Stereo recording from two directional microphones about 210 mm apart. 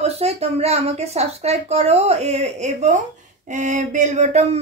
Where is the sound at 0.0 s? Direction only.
30° right (ahead or behind).